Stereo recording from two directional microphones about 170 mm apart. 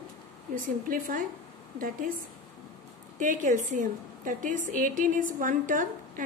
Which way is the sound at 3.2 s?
50° right (ahead or behind).